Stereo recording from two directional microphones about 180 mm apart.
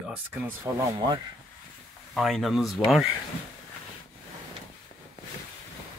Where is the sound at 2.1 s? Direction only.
Centre (ahead or behind).